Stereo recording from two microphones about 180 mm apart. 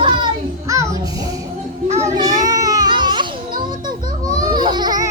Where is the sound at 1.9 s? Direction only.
20° right (ahead or behind).